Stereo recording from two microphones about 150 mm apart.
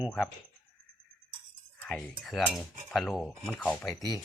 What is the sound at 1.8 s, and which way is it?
Speech, 5° left (ahead or behind).